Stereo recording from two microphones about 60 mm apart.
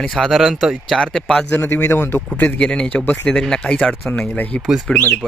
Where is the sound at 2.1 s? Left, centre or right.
Left.